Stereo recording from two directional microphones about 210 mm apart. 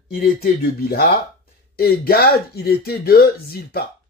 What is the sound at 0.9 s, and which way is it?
Speech, 45° left (ahead or behind).